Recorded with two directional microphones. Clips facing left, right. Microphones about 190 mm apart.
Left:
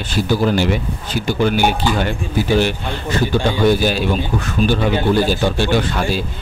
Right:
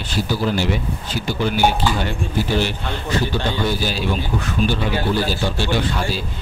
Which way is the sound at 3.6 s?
55° left (ahead or behind).